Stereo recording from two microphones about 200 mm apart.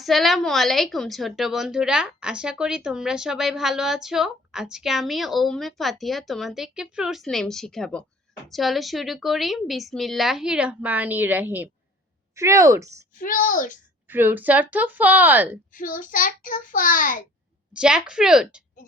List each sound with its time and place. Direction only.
0.0 s a woman's voice: centre (ahead or behind); by 12.9 s 15° right (ahead or behind)
13.1 s a child's voice: 40° left (ahead or behind)
14.1 s a woman's voice: 10° right (ahead or behind)
15.7 s child singing: 40° left (ahead or behind)
17.7 s a woman's voice: 5° right (ahead or behind)